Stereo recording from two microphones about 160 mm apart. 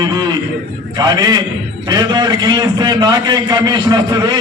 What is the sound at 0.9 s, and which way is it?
A man's voice, 25° right (ahead or behind).